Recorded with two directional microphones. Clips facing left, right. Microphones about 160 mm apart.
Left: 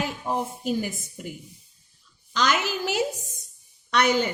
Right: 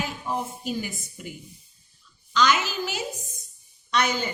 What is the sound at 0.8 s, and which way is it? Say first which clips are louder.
Speech: left 3 dB; 45° left (ahead or behind).